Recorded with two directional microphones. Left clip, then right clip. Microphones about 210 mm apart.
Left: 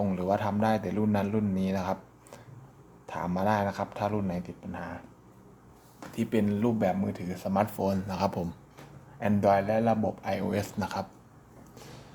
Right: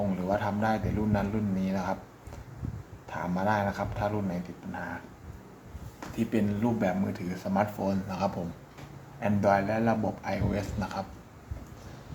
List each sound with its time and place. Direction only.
0.2 s speech: 45° left (ahead or behind)
6.1 s speech: 50° left (ahead or behind)